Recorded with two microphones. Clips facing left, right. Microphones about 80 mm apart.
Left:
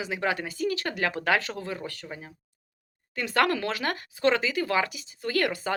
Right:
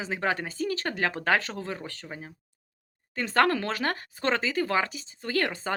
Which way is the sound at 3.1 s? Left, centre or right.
Right.